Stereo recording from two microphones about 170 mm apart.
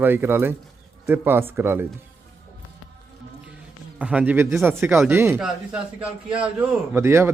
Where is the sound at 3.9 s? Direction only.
10° right (ahead or behind).